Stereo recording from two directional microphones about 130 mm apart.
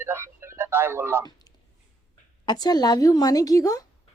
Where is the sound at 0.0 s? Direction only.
20° right (ahead or behind).